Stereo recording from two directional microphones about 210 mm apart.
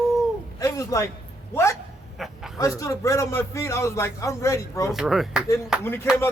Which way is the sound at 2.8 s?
15° left (ahead or behind).